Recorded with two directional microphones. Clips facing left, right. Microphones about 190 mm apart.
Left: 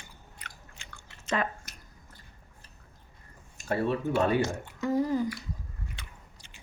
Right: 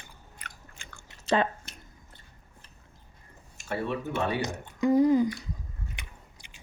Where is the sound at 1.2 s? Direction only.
30° right (ahead or behind).